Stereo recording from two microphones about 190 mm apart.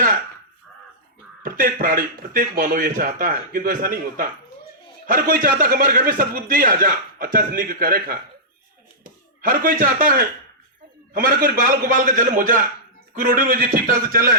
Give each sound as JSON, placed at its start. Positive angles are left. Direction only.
{"t": 1.4, "sound": "a man's voice", "side_deg": -45}
{"t": 9.4, "sound": "a man's voice", "side_deg": -50}